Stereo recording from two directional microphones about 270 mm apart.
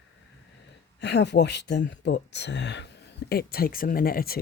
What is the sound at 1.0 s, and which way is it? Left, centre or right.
Speech, left.